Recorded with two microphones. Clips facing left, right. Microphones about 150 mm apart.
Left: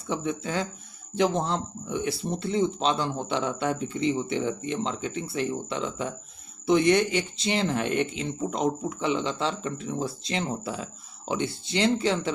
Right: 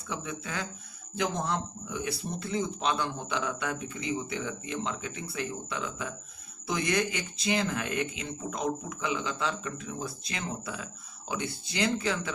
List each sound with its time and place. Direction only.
0.1 s speech: 30° left (ahead or behind)